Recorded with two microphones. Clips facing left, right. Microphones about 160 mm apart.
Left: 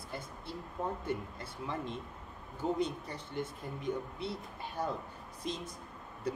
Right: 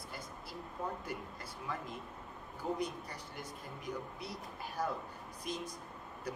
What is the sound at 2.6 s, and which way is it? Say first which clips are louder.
Speech: left 4 dB; 25° left (ahead or behind).